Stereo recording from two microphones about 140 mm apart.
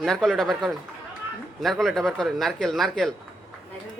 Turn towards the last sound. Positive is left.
turn(degrees=0)  # may be behind; listen again after turning